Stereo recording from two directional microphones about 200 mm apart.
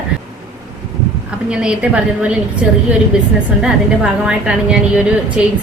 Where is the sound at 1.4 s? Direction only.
5° right (ahead or behind).